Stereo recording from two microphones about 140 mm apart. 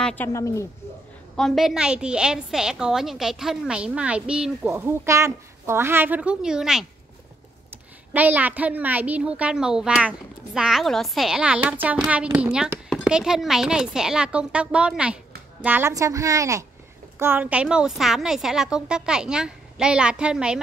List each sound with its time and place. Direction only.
0.0 s a woman's voice: 10° left (ahead or behind)
1.3 s a woman's voice: centre (ahead or behind)
4.7 s a woman's voice: 20° right (ahead or behind); by 6.9 s 5° right (ahead or behind)
8.1 s a woman's voice: 10° right (ahead or behind)
15.9 s a woman's voice: 25° right (ahead or behind); by 20.5 s 5° right (ahead or behind)